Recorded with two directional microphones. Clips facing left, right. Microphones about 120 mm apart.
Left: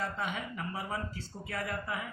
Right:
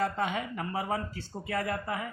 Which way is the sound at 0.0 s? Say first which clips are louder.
Right 6 dB; 55° right (ahead or behind).